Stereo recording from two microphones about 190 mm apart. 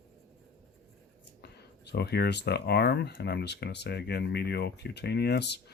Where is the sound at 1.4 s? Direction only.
60° left (ahead or behind).